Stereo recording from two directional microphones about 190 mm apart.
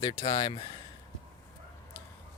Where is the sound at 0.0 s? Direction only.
30° left (ahead or behind).